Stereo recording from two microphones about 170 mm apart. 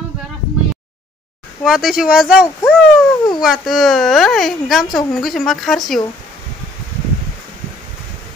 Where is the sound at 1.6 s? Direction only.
Centre (ahead or behind).